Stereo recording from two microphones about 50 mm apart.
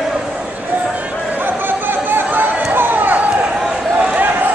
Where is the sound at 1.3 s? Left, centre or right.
Right.